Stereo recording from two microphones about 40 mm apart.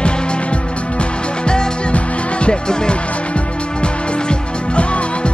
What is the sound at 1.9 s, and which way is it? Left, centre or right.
Music, left.